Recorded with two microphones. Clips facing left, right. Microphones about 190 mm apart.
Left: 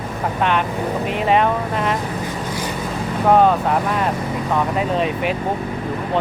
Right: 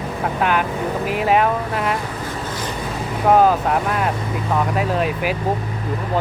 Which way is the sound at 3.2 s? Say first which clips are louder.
Even; 5° right (ahead or behind).